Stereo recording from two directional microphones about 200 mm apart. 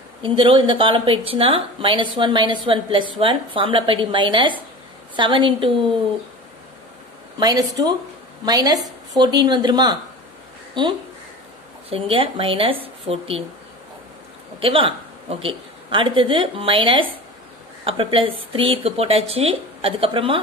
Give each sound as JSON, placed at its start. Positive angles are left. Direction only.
{"t": 0.2, "sound": "a woman's voice", "side_deg": -25}
{"t": 7.3, "sound": "a woman's voice", "side_deg": -20}
{"t": 14.6, "sound": "a woman's voice", "side_deg": -25}